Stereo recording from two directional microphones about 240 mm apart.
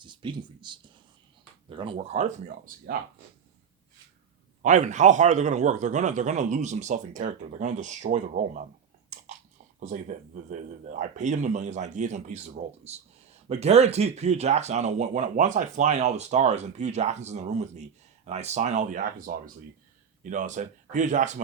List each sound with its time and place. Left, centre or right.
0.0 s speech: centre
4.6 s speech: right
9.0 s chewing: right
9.8 s speech: right